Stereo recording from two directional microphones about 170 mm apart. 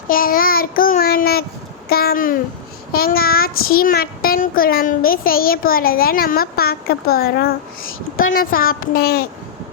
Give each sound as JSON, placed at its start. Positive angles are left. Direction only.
{"t": 0.1, "sound": "a child's voice", "side_deg": 55}